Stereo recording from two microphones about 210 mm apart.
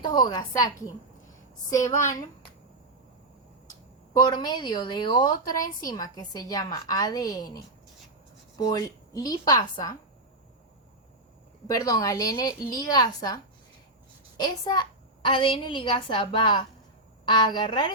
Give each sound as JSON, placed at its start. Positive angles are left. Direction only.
{"t": 0.0, "sound": "a woman's voice", "side_deg": 20}
{"t": 4.2, "sound": "a woman's voice", "side_deg": 20}
{"t": 8.7, "sound": "a woman's voice", "side_deg": 15}
{"t": 11.7, "sound": "a woman's voice", "side_deg": 15}